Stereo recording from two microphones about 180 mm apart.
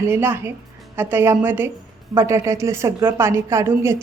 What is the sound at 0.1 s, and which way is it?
A woman's voice, 10° right (ahead or behind).